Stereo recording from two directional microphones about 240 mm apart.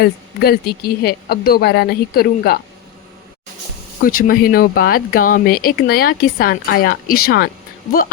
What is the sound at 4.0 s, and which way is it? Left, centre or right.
Speech, left.